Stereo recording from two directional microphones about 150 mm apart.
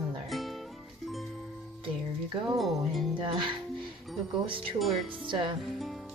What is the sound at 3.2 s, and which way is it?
Speech, 35° right (ahead or behind).